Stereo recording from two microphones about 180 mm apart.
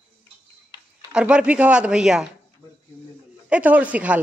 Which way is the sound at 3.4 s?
5° right (ahead or behind).